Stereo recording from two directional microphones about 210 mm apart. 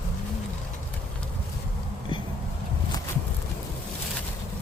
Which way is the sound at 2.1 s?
25° left (ahead or behind).